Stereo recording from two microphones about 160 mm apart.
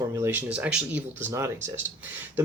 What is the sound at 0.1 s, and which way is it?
Speech, 15° right (ahead or behind).